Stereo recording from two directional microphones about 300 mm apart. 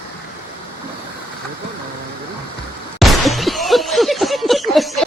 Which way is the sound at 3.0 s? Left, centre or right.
Centre.